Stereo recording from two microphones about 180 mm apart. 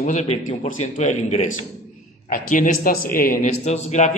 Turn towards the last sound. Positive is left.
turn(degrees=40)  # may be behind; listen again after turning